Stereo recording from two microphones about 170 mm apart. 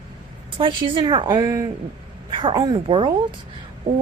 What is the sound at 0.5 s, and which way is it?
A woman's voice, 30° right (ahead or behind).